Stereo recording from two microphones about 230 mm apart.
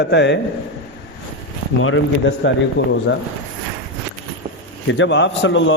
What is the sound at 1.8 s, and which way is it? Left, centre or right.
A man's voice, left.